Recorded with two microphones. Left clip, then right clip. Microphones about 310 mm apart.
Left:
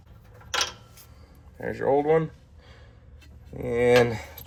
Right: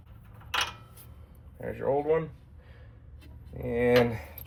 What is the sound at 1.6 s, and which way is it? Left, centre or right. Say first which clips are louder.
Speech: left 5 dB; left.